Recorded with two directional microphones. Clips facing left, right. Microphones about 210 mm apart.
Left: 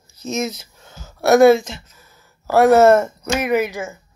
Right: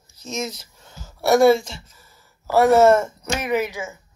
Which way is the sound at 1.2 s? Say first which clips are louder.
Left 4 dB; 50° left (ahead or behind).